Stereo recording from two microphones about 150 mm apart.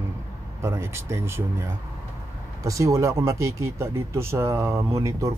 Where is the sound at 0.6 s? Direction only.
15° right (ahead or behind).